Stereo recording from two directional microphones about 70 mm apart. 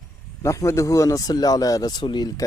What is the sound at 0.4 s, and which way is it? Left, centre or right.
Speech, left.